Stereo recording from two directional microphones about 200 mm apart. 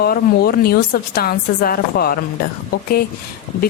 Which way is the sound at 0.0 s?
50° left (ahead or behind).